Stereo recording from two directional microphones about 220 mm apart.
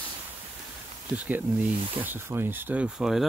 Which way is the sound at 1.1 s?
5° right (ahead or behind).